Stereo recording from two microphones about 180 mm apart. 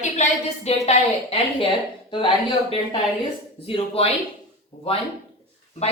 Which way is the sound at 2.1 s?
25° left (ahead or behind).